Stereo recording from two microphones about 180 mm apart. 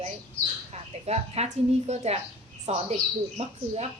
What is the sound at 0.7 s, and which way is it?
A woman's voice, 35° right (ahead or behind).